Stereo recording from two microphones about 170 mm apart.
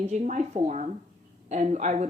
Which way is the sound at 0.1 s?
45° right (ahead or behind).